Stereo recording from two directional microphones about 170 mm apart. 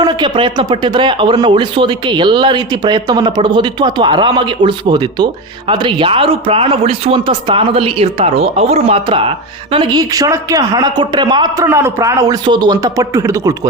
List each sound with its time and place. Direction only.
0.0 s speech: 25° right (ahead or behind)
11.7 s speech: 15° right (ahead or behind)